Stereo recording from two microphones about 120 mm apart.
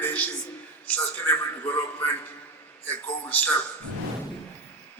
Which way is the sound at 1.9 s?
15° left (ahead or behind).